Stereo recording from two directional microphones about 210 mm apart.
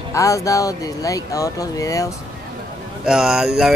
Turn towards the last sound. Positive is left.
turn(degrees=0)  # may be behind; listen again after turning